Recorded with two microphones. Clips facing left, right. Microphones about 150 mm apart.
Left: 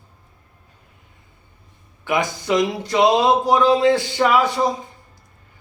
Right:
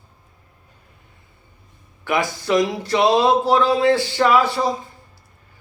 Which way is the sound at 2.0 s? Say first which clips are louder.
Even; 20° left (ahead or behind).